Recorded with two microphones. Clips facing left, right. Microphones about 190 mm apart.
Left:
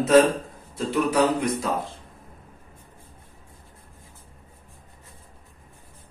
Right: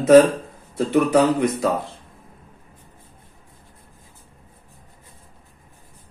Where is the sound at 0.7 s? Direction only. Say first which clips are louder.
Right 6 dB; 60° right (ahead or behind).